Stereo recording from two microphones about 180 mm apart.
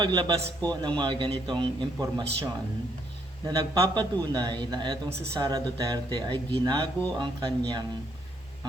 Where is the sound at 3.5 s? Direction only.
25° right (ahead or behind).